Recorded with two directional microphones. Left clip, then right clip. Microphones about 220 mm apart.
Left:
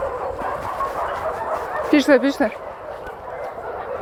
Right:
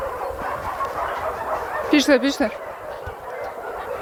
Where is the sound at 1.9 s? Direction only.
30° right (ahead or behind).